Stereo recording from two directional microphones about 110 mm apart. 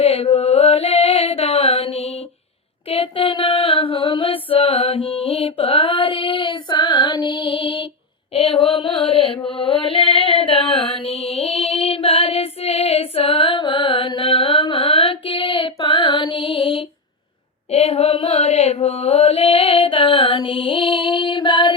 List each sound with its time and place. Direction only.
0.0 s mantra: 65° left (ahead or behind)
5.4 s female singing: 60° left (ahead or behind)
9.0 s mantra: 60° left (ahead or behind)
9.5 s a sound: 55° left (ahead or behind)
17.7 s mantra: 70° left (ahead or behind); by 21.7 s 45° left (ahead or behind)